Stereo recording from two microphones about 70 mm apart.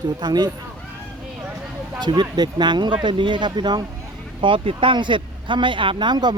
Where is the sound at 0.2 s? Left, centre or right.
Right.